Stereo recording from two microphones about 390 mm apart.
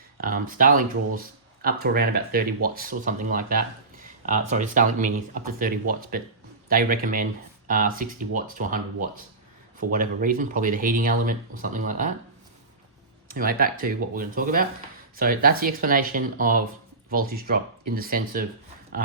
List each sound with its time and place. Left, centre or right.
0.2 s speech: right
13.2 s speech: right